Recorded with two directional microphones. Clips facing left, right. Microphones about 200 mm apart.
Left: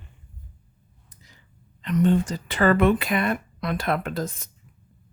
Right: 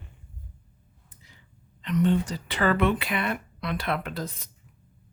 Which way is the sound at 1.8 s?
45° left (ahead or behind).